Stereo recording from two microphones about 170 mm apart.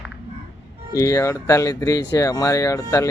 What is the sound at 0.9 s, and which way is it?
Speech, 20° left (ahead or behind).